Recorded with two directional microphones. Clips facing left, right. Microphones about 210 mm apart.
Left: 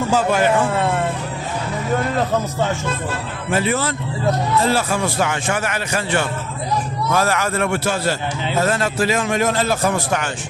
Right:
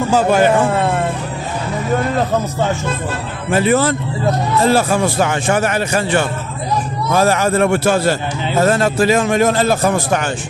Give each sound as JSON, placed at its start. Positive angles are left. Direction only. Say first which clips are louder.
{"t": 0.2, "sound": "a man's voice", "louder": "right 6 dB", "side_deg": -40}
{"t": 3.5, "sound": "a man's voice", "louder": "right 6 dB", "side_deg": -45}
{"t": 7.9, "sound": "a man's voice", "louder": "right 6 dB", "side_deg": -50}